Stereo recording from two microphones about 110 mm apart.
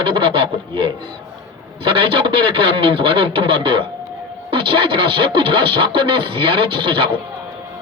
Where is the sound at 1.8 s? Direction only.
55° right (ahead or behind).